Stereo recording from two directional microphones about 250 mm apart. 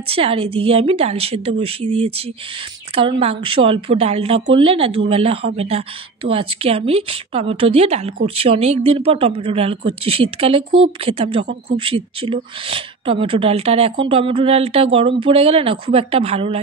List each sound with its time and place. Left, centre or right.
0.1 s a woman's voice: right